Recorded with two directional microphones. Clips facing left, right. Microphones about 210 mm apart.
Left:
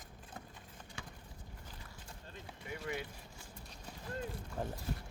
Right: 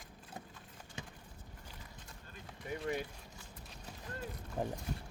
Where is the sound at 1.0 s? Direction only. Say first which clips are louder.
Right 2 dB; 20° right (ahead or behind).